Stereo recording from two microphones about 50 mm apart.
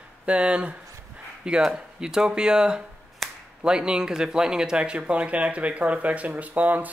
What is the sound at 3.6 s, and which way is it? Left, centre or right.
Speech, centre.